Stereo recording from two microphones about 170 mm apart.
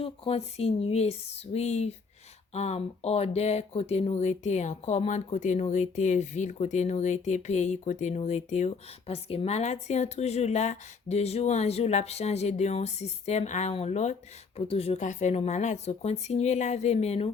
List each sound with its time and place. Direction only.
0.0 s speech: 35° left (ahead or behind)